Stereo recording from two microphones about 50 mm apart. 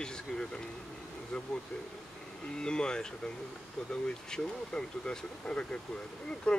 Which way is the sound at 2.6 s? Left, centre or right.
Centre.